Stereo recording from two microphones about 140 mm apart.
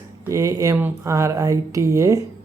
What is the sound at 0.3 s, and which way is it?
Speech, 25° right (ahead or behind).